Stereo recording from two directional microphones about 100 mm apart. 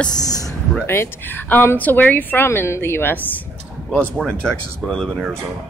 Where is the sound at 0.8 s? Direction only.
20° left (ahead or behind).